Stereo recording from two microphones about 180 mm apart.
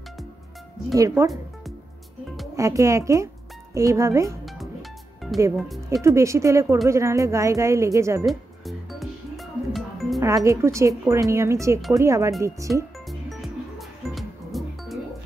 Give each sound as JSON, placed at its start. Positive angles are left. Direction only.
{"t": 0.9, "sound": "speech", "side_deg": -20}
{"t": 2.5, "sound": "speech", "side_deg": -15}
{"t": 5.2, "sound": "music", "side_deg": 0}
{"t": 6.0, "sound": "speech", "side_deg": -15}
{"t": 8.3, "sound": "music", "side_deg": 0}
{"t": 10.2, "sound": "speech", "side_deg": -15}
{"t": 13.3, "sound": "music", "side_deg": 0}